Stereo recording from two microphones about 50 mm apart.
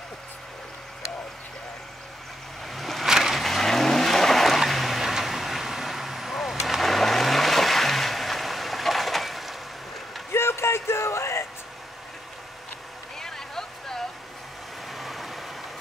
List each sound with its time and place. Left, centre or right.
2.6 s vehicle: centre
3.1 s vehicle: centre
3.3 s vehicle: centre
10.3 s a sound: left
13.2 s a sound: centre
14.9 s vehicle: centre